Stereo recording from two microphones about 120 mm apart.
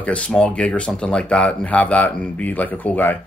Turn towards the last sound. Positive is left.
turn(degrees=15)  # may be behind; listen again after turning